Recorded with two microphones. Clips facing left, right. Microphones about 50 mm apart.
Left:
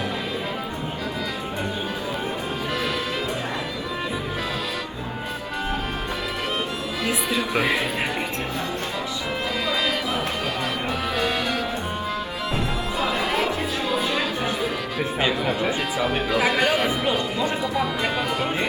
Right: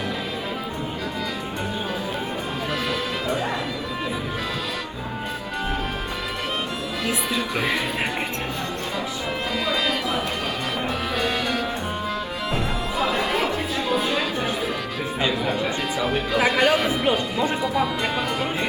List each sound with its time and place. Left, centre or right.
7.0 s music: centre
7.5 s speech: centre
9.6 s music: centre
15.2 s speech: centre